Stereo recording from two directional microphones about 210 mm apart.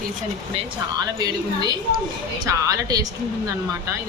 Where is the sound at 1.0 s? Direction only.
20° right (ahead or behind).